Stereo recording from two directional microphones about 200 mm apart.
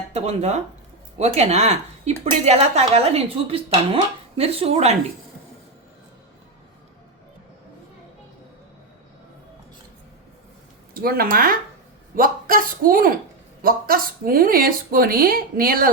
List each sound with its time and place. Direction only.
0.1 s speech: 35° right (ahead or behind)
10.9 s speech: 50° right (ahead or behind)